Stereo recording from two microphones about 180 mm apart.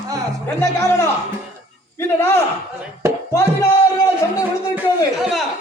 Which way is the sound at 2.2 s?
15° left (ahead or behind).